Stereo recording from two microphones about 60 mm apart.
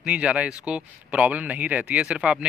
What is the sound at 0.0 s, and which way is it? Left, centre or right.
Speech, centre.